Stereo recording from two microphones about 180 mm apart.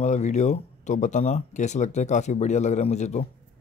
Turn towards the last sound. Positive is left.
turn(degrees=40)  # may be behind; listen again after turning